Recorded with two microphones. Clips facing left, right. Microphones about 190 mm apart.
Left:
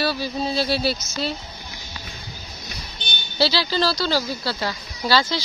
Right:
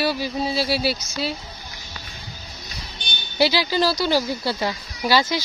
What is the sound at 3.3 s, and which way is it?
Speech, 15° right (ahead or behind).